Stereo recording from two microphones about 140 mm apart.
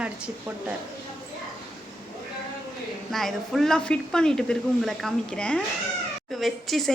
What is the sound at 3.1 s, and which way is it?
Speech, centre (ahead or behind).